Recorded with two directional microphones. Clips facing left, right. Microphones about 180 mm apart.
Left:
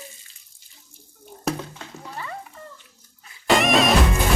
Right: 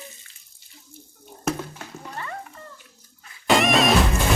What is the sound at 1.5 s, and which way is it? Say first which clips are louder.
Music: even; centre (ahead or behind).